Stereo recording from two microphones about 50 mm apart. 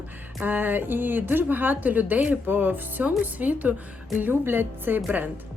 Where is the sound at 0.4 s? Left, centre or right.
Right.